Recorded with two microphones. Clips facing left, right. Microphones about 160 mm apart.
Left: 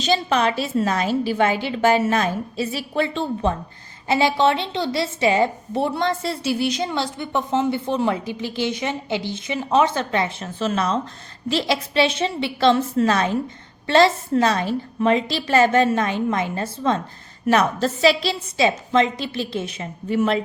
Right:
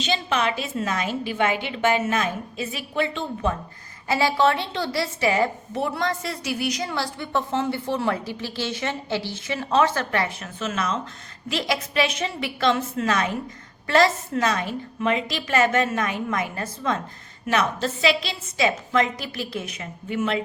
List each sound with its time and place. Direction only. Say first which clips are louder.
0.0 s a woman's voice: left 4 dB; 40° left (ahead or behind)
4.1 s a woman's voice: left 2 dB; 25° left (ahead or behind)
17.4 s a woman's voice: left 5 dB; 40° left (ahead or behind)